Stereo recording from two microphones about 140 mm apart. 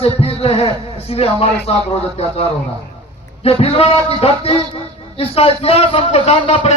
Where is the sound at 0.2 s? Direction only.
45° left (ahead or behind).